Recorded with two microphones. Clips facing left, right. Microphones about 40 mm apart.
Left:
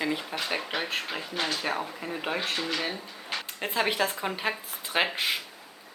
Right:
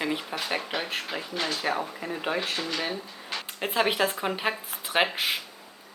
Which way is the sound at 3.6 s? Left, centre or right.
Centre.